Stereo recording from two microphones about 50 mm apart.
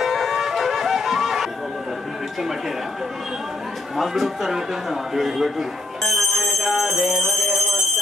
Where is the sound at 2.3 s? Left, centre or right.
Centre.